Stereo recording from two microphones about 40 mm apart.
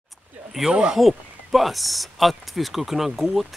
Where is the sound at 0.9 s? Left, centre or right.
Centre.